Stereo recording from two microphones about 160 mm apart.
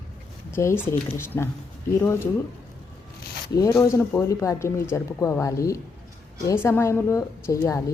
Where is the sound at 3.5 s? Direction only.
20° left (ahead or behind).